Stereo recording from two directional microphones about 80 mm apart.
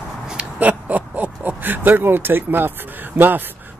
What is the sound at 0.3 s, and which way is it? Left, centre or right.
Speech, centre.